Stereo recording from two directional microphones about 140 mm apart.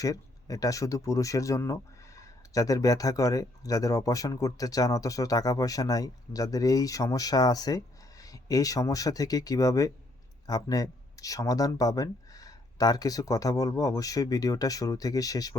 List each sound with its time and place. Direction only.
0.0 s speech: 25° left (ahead or behind)